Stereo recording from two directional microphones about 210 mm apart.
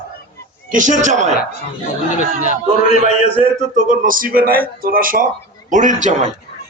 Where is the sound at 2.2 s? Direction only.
35° left (ahead or behind).